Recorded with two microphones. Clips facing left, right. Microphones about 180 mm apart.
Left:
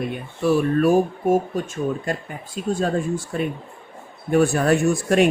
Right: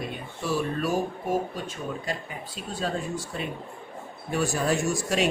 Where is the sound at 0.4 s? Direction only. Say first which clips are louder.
Left 10 dB; 55° left (ahead or behind).